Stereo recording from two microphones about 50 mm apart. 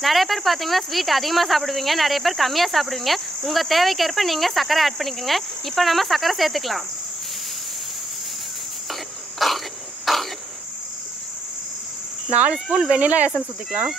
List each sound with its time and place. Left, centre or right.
0.0 s speech: centre
9.4 s cough: centre
10.1 s cricket: centre
12.3 s cricket: right